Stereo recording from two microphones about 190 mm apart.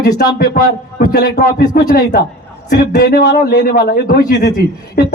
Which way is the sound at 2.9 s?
55° left (ahead or behind).